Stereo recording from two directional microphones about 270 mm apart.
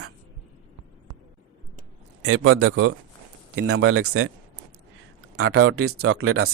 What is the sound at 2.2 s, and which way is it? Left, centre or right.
A man's voice, right.